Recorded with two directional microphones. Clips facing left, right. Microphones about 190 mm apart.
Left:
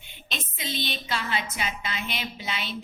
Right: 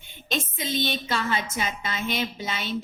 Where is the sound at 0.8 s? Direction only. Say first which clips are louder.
Right 4 dB; 45° right (ahead or behind).